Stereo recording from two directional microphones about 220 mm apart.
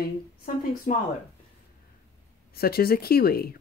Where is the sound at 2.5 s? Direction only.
45° left (ahead or behind).